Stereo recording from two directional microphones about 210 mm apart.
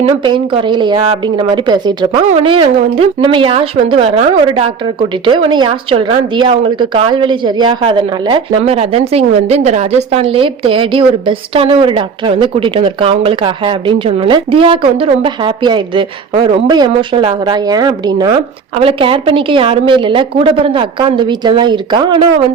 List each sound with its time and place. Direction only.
0.0 s a woman's voice: 20° right (ahead or behind)